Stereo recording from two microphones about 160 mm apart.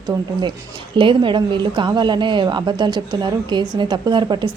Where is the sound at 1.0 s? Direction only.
30° right (ahead or behind).